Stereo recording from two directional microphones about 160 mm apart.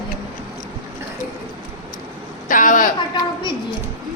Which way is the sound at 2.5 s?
55° left (ahead or behind).